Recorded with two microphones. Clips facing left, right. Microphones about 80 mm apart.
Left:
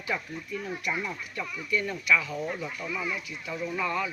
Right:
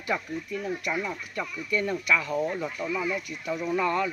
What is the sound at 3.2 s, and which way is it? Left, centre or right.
Speech, right.